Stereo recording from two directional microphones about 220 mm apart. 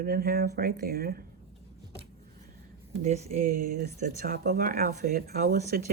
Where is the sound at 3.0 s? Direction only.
30° right (ahead or behind).